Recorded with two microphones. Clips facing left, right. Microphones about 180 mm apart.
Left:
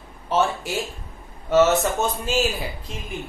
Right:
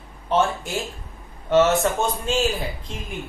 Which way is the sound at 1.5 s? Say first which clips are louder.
Even; 5° left (ahead or behind).